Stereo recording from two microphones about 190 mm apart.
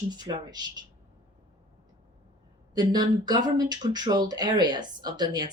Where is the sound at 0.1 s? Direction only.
20° right (ahead or behind).